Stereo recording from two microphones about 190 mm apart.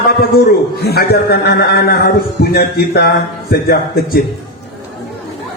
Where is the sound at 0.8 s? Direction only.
55° left (ahead or behind).